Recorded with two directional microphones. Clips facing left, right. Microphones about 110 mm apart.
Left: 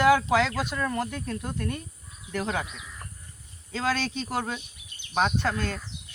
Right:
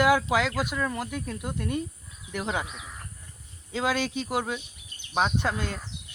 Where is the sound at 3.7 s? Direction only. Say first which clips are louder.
Right 1 dB; 15° right (ahead or behind).